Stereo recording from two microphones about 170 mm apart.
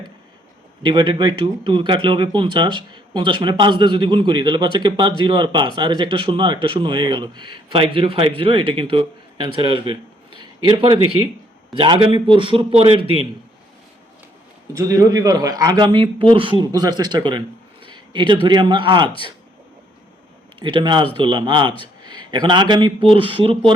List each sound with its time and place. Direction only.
0.8 s a man's voice: 25° right (ahead or behind)
14.7 s a man's voice: 20° right (ahead or behind)
20.6 s a man's voice: 30° right (ahead or behind)